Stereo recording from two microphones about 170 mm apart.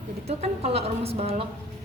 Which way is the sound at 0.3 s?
40° right (ahead or behind).